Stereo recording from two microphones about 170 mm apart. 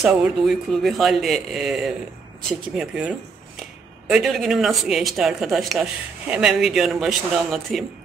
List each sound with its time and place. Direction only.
0.0 s speech: 5° right (ahead or behind)